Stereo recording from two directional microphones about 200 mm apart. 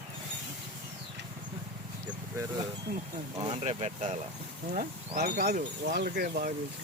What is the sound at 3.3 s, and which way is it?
Speech, 30° right (ahead or behind).